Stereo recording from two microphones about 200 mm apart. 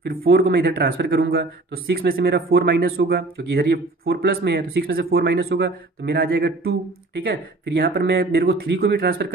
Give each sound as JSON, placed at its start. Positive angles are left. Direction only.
{"t": 0.0, "sound": "speech", "side_deg": -50}